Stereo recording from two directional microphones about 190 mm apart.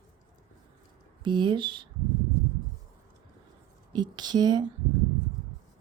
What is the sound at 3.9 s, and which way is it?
Speech, 20° right (ahead or behind).